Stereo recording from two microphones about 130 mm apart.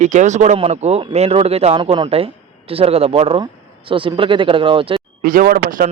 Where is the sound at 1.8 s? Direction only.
35° right (ahead or behind).